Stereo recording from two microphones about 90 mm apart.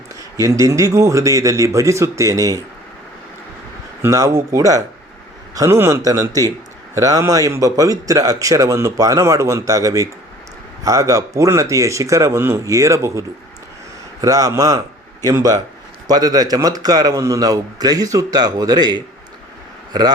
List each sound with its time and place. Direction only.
0.3 s a man's voice: 35° right (ahead or behind)
4.0 s a man's voice: 35° right (ahead or behind)